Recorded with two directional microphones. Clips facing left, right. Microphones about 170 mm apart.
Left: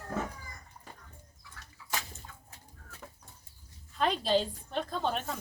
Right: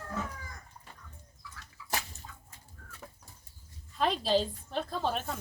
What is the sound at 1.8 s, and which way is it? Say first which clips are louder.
Bathtub: right 2 dB; 55° left (ahead or behind).